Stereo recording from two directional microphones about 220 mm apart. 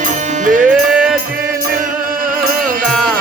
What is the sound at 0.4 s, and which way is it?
Music, 35° right (ahead or behind).